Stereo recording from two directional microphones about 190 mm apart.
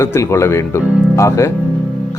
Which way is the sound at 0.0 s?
15° left (ahead or behind).